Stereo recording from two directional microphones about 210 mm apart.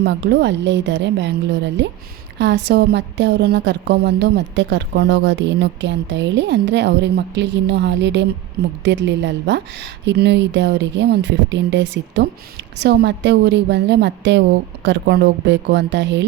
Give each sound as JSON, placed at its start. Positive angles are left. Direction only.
{"t": 0.0, "sound": "a woman's voice", "side_deg": -55}